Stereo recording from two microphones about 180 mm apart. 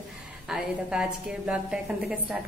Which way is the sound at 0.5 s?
5° right (ahead or behind).